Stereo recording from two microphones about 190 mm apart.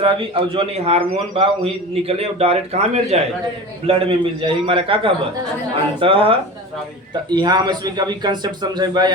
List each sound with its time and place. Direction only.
0.0 s a man's voice: 30° right (ahead or behind)